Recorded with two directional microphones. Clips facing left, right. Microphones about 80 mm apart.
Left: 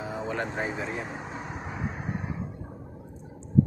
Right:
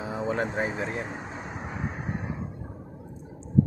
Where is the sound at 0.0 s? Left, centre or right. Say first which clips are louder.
Right 3 dB; centre.